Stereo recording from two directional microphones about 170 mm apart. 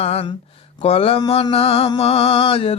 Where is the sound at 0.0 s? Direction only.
35° left (ahead or behind).